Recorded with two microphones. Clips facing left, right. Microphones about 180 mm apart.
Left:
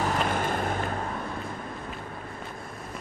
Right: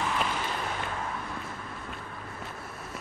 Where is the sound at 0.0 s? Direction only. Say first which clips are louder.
Left 4 dB; 45° left (ahead or behind).